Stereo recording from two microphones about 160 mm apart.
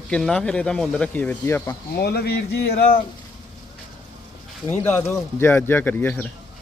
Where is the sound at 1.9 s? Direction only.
90° left; by 2.9 s 75° left (ahead or behind).